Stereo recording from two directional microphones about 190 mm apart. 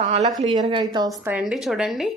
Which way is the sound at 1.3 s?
5° right (ahead or behind).